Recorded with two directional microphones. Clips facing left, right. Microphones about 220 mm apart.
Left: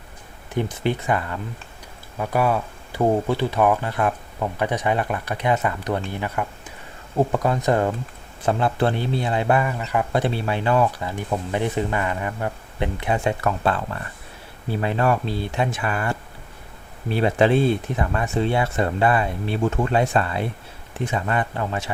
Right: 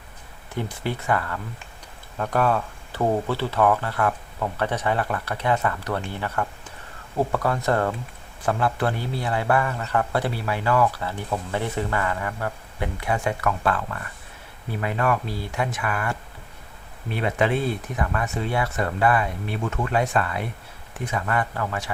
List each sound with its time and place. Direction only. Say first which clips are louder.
0.5 s a man's voice: left 5 dB; 20° left (ahead or behind)
2.1 s a man's voice: left 1 dB; 10° left (ahead or behind); by 21.8 s 25° left (ahead or behind)